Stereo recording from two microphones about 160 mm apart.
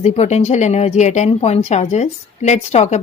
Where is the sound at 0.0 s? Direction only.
45° left (ahead or behind).